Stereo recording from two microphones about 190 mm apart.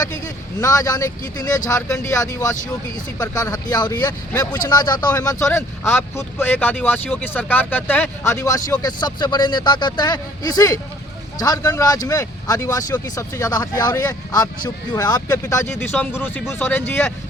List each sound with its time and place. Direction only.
0.6 s speech: 15° left (ahead or behind)